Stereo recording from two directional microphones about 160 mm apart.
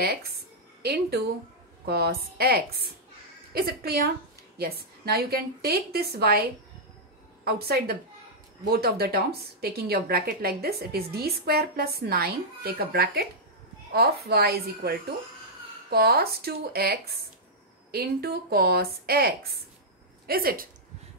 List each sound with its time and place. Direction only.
0.0 s a woman's voice: 75° right (ahead or behind)